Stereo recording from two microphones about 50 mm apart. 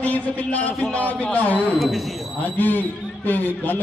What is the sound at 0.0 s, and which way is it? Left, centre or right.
A man's voice, left.